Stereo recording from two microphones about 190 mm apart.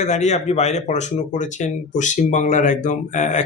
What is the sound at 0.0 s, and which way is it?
Speech, 35° left (ahead or behind).